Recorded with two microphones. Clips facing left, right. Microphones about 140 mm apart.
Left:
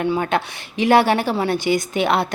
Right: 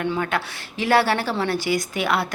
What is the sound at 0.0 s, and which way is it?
A woman's voice, 25° left (ahead or behind).